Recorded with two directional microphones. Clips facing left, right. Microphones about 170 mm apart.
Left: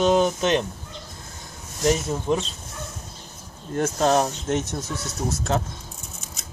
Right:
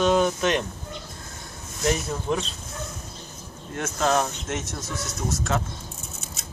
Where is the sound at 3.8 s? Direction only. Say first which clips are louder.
Left 3 dB; 35° left (ahead or behind).